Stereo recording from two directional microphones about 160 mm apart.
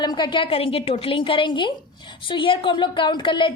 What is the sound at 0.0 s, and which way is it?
A woman's voice, 30° left (ahead or behind).